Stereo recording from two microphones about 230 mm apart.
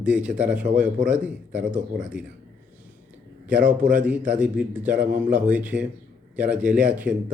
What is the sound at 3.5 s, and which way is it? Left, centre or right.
Speech, centre.